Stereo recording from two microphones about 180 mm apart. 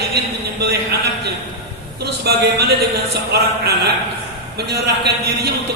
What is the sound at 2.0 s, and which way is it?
Speech, 65° right (ahead or behind).